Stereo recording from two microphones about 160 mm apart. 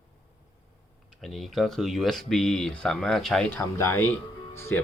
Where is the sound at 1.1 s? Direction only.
Centre (ahead or behind).